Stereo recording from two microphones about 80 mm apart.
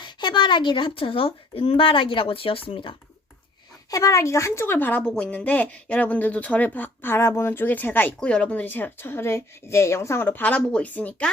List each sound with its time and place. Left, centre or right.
0.0 s speech: left
3.9 s a woman's voice: left
5.0 s speech: centre